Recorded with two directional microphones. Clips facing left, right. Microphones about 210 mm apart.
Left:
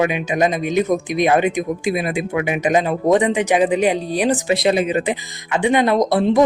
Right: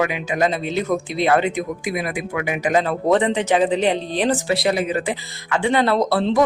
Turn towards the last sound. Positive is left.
turn(degrees=15)  # may be behind; listen again after turning